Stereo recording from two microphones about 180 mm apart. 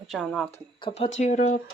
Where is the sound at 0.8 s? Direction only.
30° left (ahead or behind).